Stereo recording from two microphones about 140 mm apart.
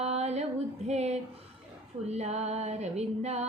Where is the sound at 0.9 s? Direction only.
50° right (ahead or behind).